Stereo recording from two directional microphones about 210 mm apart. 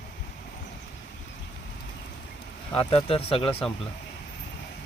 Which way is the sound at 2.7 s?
25° left (ahead or behind).